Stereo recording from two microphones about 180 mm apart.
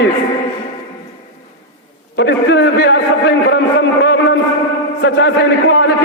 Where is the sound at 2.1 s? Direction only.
70° left (ahead or behind).